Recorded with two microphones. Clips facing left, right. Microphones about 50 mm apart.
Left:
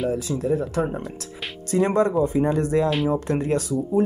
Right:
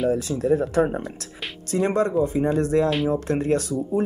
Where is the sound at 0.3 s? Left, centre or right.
Centre.